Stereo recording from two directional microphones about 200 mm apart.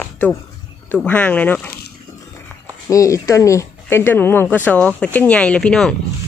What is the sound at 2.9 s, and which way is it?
Speech, 15° left (ahead or behind).